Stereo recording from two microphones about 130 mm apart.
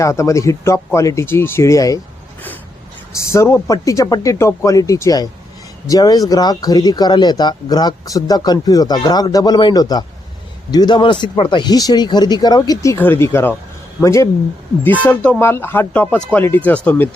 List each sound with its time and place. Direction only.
0.0 s speech: 25° left (ahead or behind)
3.2 s speech: 20° left (ahead or behind)
15.0 s speech: 10° left (ahead or behind)